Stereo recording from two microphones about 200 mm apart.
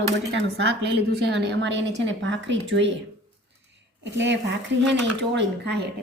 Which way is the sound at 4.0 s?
65° right (ahead or behind).